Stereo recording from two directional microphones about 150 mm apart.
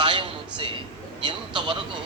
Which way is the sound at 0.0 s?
35° right (ahead or behind).